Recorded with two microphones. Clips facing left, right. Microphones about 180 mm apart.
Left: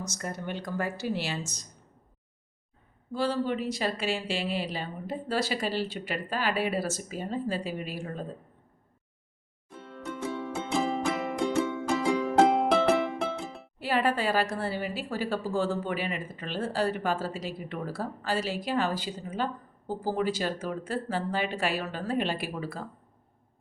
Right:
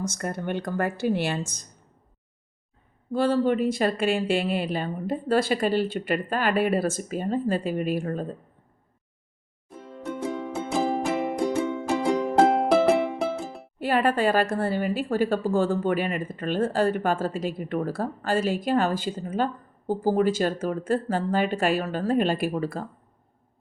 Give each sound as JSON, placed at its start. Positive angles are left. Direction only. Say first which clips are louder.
{"t": 0.0, "sound": "speech", "louder": "right 6 dB", "side_deg": -55}
{"t": 3.1, "sound": "a woman's voice", "louder": "right 6 dB", "side_deg": -55}
{"t": 9.7, "sound": "music", "louder": "right 4 dB", "side_deg": -15}
{"t": 10.8, "sound": "music", "louder": "right 4 dB", "side_deg": -35}
{"t": 12.1, "sound": "music", "louder": "right 3 dB", "side_deg": -40}
{"t": 13.7, "sound": "a woman's voice", "louder": "right 4 dB", "side_deg": -50}